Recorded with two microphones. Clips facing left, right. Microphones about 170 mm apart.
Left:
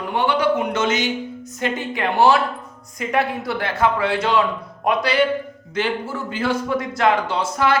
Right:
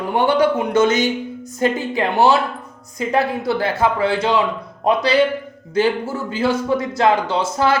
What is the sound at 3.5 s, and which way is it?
Speech, 30° right (ahead or behind).